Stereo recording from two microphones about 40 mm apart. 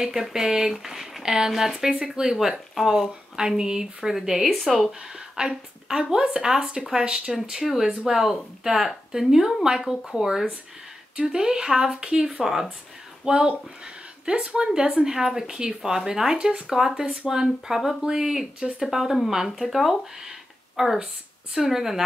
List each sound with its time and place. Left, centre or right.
0.3 s a woman's voice: centre
4.1 s speech: centre
5.4 s speech: centre